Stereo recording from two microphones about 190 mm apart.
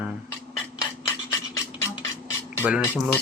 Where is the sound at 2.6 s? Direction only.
5° right (ahead or behind).